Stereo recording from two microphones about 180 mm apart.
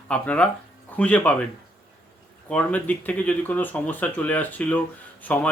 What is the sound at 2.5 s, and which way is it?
Speech, 5° left (ahead or behind).